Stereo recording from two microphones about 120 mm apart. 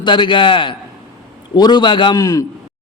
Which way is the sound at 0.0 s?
40° left (ahead or behind).